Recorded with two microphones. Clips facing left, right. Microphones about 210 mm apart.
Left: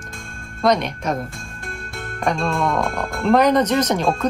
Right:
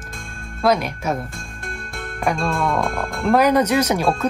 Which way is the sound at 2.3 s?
Centre (ahead or behind).